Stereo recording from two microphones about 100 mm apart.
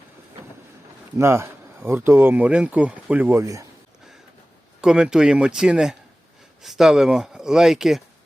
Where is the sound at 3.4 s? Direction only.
35° right (ahead or behind).